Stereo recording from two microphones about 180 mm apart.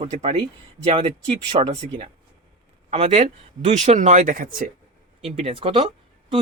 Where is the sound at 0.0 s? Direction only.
35° right (ahead or behind).